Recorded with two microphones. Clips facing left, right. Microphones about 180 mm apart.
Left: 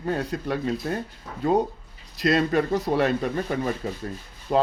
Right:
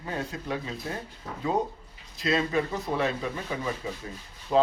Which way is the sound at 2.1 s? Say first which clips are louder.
Left 5 dB; 75° left (ahead or behind).